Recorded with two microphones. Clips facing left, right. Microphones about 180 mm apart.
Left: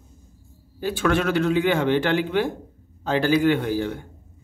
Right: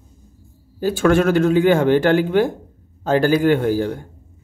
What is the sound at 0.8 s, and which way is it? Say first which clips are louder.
A man's voice: right 6 dB; 45° right (ahead or behind).